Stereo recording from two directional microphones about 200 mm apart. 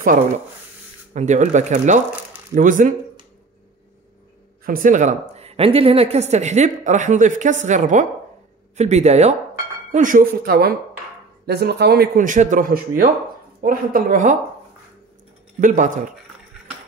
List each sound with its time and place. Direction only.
1.1 s a woman's voice: 35° right (ahead or behind)
4.6 s a woman's voice: 40° right (ahead or behind)
15.6 s a woman's voice: 40° right (ahead or behind)